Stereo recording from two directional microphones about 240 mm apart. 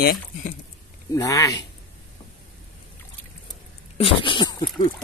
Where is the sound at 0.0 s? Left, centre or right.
Left.